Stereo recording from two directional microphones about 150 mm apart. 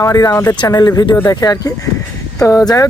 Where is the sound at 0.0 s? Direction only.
25° left (ahead or behind).